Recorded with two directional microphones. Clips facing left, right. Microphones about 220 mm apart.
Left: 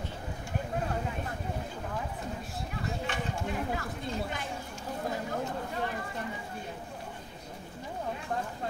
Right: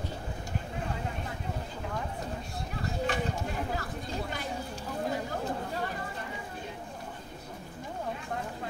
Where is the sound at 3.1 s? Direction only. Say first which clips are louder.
Right 4 dB; 35° right (ahead or behind).